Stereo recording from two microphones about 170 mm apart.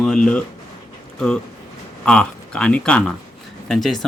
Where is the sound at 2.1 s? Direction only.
5° left (ahead or behind).